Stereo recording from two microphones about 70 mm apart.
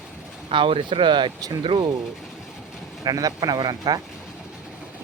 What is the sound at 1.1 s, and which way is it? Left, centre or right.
Speech, right.